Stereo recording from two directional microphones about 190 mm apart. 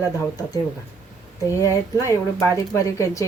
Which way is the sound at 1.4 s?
15° left (ahead or behind).